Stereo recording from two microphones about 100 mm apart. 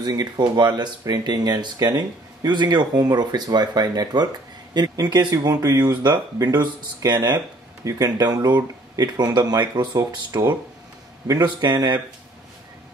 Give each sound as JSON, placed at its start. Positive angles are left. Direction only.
{"t": 0.0, "sound": "speech", "side_deg": -40}
{"t": 10.3, "sound": "speech", "side_deg": -30}
{"t": 11.4, "sound": "speech", "side_deg": -45}